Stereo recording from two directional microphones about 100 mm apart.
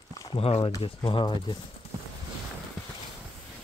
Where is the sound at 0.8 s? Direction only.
55° left (ahead or behind).